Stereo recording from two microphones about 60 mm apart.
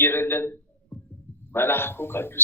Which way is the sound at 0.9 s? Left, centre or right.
Centre.